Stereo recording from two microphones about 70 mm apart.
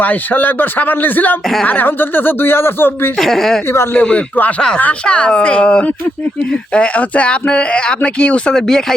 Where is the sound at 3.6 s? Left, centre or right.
Left.